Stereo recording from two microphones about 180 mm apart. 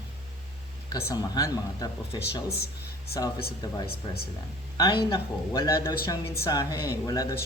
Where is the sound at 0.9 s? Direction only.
20° left (ahead or behind).